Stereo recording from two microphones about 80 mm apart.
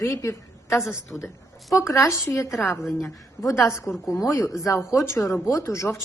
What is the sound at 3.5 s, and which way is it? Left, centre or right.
A woman's voice, left.